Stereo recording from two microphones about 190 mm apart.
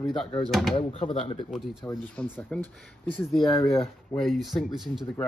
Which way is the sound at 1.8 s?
10° left (ahead or behind).